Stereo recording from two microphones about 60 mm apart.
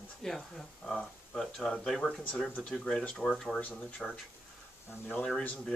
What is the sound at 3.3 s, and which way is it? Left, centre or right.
Speech, centre.